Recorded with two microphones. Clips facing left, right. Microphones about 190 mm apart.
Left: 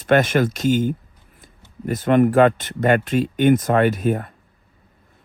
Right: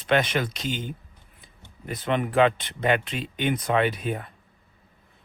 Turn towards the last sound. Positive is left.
turn(degrees=45)  # may be behind; listen again after turning